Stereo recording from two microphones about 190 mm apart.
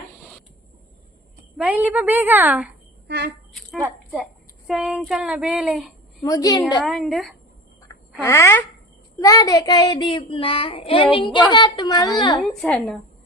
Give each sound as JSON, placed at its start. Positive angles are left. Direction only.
{"t": 0.2, "sound": "a sound", "side_deg": 5}
{"t": 1.5, "sound": "a woman's voice", "side_deg": -10}
{"t": 3.1, "sound": "speech", "side_deg": -60}
{"t": 4.1, "sound": "speech", "side_deg": 0}
{"t": 6.2, "sound": "child singing", "side_deg": 20}
{"t": 6.8, "sound": "a woman's voice", "side_deg": 0}
{"t": 8.2, "sound": "a sound", "side_deg": 15}
{"t": 9.2, "sound": "child singing", "side_deg": 20}
{"t": 12.5, "sound": "a woman's voice", "side_deg": 5}